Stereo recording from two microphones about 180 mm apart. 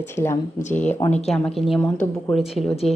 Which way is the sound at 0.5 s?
40° left (ahead or behind).